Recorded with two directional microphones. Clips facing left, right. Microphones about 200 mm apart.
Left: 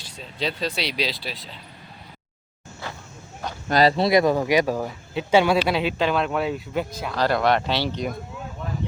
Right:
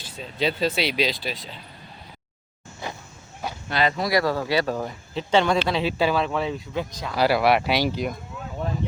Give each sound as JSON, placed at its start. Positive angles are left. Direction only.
{"t": 0.0, "sound": "speech", "side_deg": 0}
{"t": 2.8, "sound": "a sound", "side_deg": -20}
{"t": 3.7, "sound": "speech", "side_deg": 35}
{"t": 7.2, "sound": "speech", "side_deg": -5}